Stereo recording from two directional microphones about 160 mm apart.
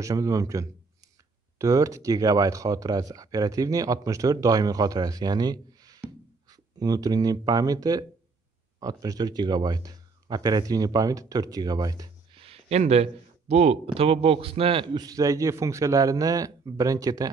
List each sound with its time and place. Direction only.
0.0 s speech: 20° right (ahead or behind)
12.4 s speech: 40° right (ahead or behind); by 17.3 s 20° right (ahead or behind)